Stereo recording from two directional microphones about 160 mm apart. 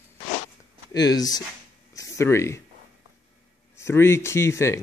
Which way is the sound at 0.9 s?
25° left (ahead or behind).